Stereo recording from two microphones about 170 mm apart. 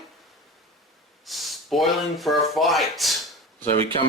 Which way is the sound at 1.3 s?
Centre (ahead or behind).